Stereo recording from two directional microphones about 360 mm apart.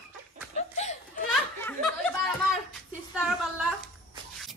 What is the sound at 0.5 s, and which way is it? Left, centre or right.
Laughter, centre.